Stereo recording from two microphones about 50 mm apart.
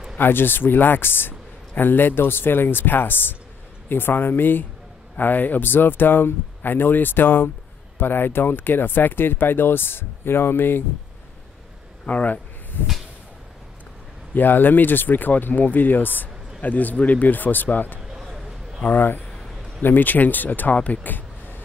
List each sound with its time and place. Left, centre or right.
0.2 s speech: left
12.1 s speech: left
14.3 s speech: left
18.0 s a sound: centre
18.9 s speech: left